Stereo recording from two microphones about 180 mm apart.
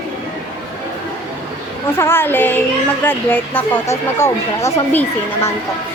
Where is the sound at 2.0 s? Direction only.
15° left (ahead or behind).